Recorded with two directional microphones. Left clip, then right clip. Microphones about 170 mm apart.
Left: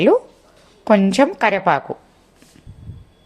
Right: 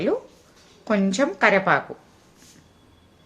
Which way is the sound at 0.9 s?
30° left (ahead or behind).